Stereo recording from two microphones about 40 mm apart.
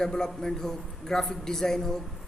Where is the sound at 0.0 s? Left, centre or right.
Centre.